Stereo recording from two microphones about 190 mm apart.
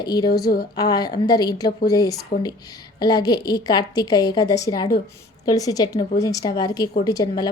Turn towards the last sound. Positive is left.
turn(degrees=20)  # may be behind; listen again after turning